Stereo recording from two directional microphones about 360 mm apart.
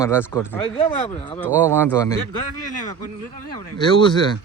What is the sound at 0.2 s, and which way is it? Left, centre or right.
Speech, centre.